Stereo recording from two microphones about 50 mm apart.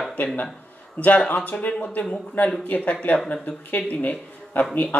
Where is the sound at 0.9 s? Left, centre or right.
Left.